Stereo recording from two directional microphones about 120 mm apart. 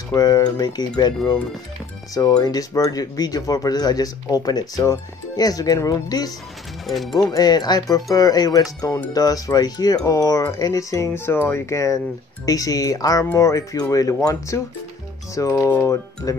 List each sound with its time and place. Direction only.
0.1 s speech: 35° left (ahead or behind)
2.1 s speech: 30° left (ahead or behind)
6.9 s speech: centre (ahead or behind)
7.2 s speech: 35° left (ahead or behind)